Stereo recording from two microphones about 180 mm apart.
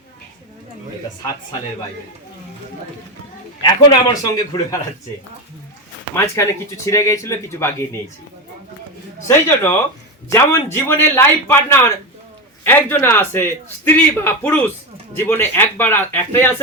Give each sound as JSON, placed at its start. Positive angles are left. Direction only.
{"t": 4.1, "sound": "a man's voice", "side_deg": 20}
{"t": 6.1, "sound": "a man's voice", "side_deg": 15}
{"t": 9.2, "sound": "a man's voice", "side_deg": 10}